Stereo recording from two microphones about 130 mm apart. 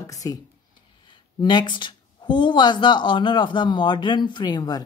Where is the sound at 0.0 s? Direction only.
25° left (ahead or behind).